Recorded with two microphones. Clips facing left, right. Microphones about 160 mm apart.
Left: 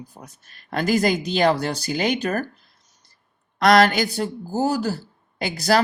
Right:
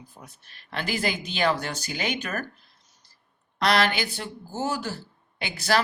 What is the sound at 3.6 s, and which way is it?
Speech, 45° left (ahead or behind).